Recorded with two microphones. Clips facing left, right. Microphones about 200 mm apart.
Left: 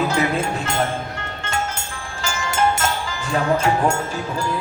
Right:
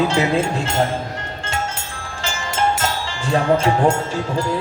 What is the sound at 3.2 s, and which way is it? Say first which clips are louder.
Speech: right 3 dB; 30° right (ahead or behind).